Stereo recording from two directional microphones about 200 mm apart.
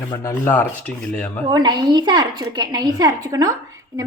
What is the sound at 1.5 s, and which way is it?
A woman's voice, 20° right (ahead or behind).